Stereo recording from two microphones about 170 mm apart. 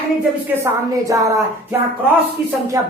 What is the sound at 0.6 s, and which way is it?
A woman's voice, 20° right (ahead or behind).